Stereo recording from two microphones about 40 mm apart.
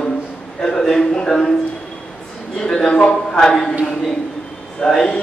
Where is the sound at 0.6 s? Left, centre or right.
Centre.